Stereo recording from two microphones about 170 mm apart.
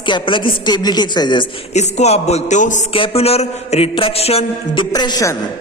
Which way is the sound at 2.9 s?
35° left (ahead or behind).